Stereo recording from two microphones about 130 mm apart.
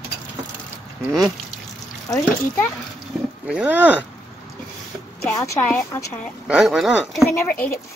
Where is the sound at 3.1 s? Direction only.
Centre (ahead or behind).